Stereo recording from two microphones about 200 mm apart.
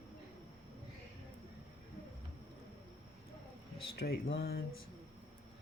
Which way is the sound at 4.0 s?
55° left (ahead or behind).